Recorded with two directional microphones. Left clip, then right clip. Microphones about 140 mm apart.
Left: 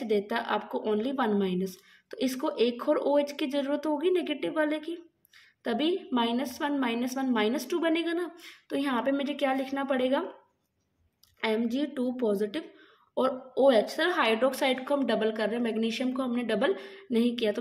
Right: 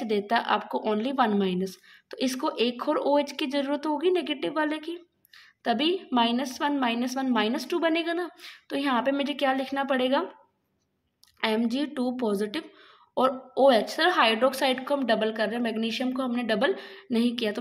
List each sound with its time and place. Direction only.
0.0 s a woman's voice: 35° right (ahead or behind)
11.4 s a woman's voice: 35° right (ahead or behind)